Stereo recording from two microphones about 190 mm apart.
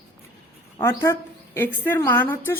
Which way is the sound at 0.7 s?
15° left (ahead or behind).